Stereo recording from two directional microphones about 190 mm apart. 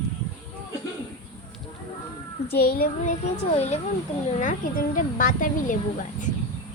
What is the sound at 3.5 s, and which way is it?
Speech, 35° left (ahead or behind).